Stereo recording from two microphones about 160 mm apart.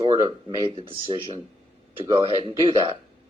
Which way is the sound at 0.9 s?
35° right (ahead or behind).